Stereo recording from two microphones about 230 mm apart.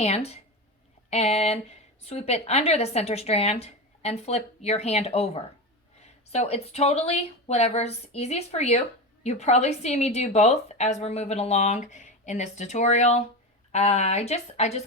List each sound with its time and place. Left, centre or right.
0.0 s a woman's voice: left